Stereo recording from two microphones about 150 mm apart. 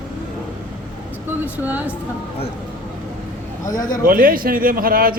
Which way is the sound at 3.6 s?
25° left (ahead or behind).